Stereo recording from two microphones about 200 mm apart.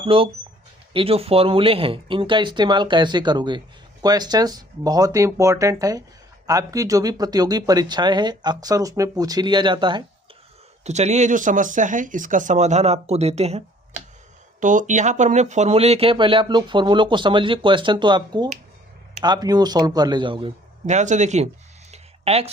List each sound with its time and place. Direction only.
0.0 s speech: 25° right (ahead or behind)
10.8 s speech: 35° right (ahead or behind)
14.6 s speech: 40° right (ahead or behind)
21.9 s a sound: 30° right (ahead or behind)